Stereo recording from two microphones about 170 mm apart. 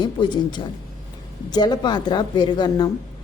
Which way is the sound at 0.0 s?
25° left (ahead or behind).